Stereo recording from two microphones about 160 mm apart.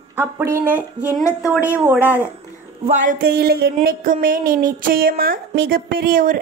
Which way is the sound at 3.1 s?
75° right (ahead or behind).